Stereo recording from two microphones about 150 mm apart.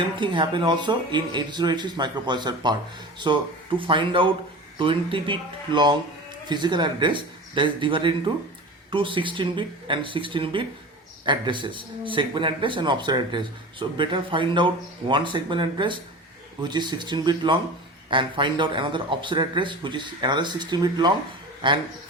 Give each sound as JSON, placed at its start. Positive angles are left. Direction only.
{"t": 0.2, "sound": "a man's voice", "side_deg": -35}